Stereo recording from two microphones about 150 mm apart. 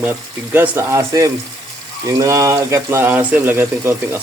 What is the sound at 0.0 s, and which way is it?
Speech, 15° right (ahead or behind).